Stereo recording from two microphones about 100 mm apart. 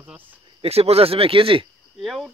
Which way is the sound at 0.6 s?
90° right.